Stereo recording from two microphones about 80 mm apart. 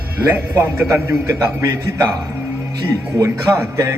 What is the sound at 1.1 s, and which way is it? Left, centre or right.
A man's voice, right.